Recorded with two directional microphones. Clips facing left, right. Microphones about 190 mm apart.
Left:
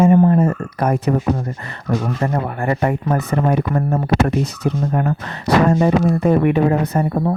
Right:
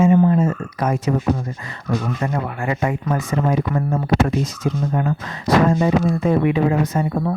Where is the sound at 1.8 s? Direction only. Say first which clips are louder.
Left 2 dB; 40° left (ahead or behind).